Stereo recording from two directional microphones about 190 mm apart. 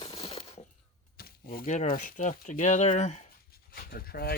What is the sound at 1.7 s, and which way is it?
Speech, 40° left (ahead or behind).